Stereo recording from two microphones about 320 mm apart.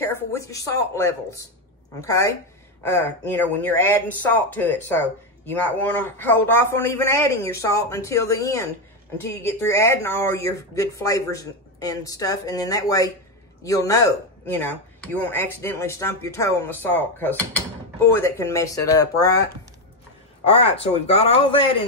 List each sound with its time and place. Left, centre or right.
0.0 s speech: centre
9.7 s speech: centre
20.4 s speech: centre